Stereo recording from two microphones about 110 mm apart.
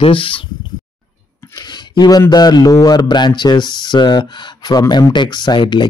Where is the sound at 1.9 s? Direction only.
40° left (ahead or behind).